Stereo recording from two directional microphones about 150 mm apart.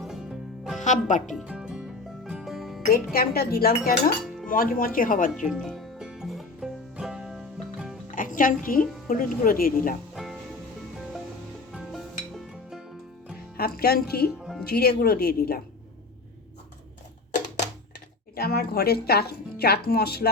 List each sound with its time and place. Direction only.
0.0 s music: 5° right (ahead or behind)
0.8 s speech: 55° left (ahead or behind)
1.3 s music: centre (ahead or behind)
2.9 s speech: 85° left; by 5.3 s 65° left (ahead or behind)
5.4 s music: centre (ahead or behind)
8.1 s music: 65° left (ahead or behind)
9.0 s speech: 65° left (ahead or behind)
10.2 s music: 5° right (ahead or behind)
11.7 s music: 5° right (ahead or behind)
13.6 s speech: 90° left
18.3 s speech: 90° left